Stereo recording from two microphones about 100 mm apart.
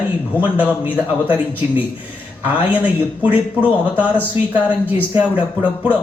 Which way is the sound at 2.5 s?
15° right (ahead or behind).